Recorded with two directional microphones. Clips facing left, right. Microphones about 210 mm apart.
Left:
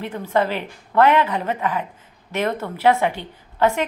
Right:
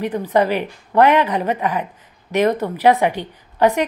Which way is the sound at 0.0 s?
15° right (ahead or behind).